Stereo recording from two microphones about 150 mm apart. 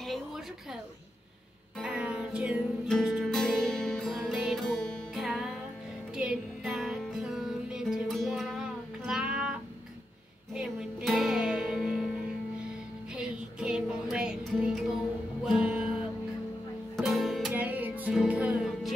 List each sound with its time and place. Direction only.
0.0 s a sound: centre (ahead or behind)
1.8 s music: 5° right (ahead or behind)
13.1 s music: 5° right (ahead or behind)